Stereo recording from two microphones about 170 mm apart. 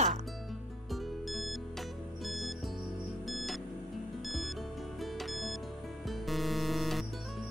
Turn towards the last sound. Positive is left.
turn(degrees=0)  # may be behind; listen again after turning